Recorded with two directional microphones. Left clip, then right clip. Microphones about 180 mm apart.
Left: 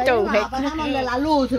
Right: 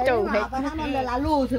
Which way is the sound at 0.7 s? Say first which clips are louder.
Left 4 dB; 10° right (ahead or behind).